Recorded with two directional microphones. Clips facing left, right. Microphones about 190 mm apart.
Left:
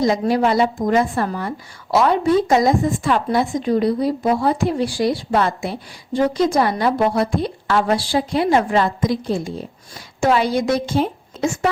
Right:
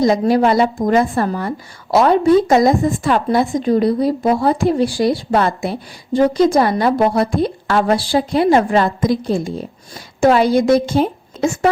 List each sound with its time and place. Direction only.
0.0 s a woman's voice: 40° right (ahead or behind)
10.2 s a woman's voice: 45° right (ahead or behind)